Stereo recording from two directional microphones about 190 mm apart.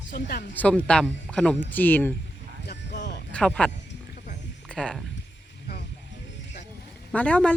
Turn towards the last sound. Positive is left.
turn(degrees=5)  # may be behind; listen again after turning